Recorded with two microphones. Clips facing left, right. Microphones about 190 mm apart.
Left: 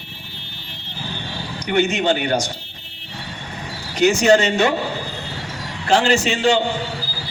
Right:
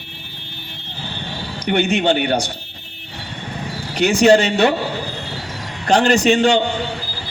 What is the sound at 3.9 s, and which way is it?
Speech, 60° right (ahead or behind).